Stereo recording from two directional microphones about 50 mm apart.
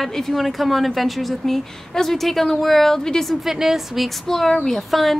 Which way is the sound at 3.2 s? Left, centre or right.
Centre.